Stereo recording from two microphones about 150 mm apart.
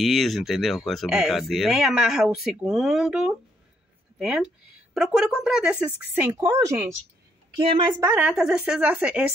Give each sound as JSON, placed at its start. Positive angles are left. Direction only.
{"t": 0.0, "sound": "speech", "side_deg": 0}
{"t": 7.5, "sound": "a woman's voice", "side_deg": -35}
{"t": 8.0, "sound": "speech", "side_deg": -10}